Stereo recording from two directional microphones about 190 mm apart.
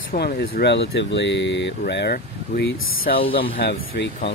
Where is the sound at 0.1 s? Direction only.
50° left (ahead or behind).